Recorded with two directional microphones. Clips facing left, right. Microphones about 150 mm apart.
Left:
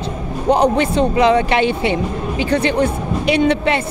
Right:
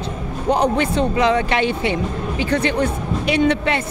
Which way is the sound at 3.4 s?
20° left (ahead or behind).